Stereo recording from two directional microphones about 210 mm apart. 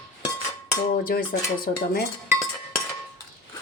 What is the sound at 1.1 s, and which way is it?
Speech, 50° left (ahead or behind).